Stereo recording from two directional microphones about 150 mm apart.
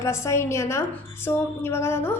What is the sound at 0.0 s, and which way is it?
A woman's voice, 20° left (ahead or behind).